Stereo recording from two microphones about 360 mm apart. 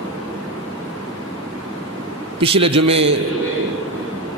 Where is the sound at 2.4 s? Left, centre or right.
Centre.